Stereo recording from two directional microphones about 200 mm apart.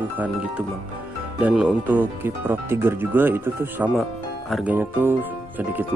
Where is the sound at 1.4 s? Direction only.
5° right (ahead or behind).